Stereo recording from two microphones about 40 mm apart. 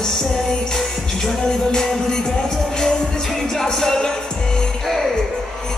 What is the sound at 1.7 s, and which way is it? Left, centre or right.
Music, centre.